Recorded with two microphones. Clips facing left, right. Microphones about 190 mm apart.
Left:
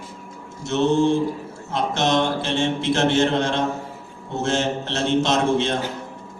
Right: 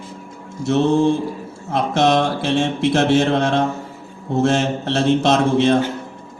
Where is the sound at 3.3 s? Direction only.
65° right (ahead or behind).